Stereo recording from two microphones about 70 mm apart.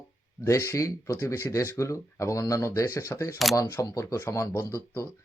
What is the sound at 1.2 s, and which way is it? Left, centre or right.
Speech, left.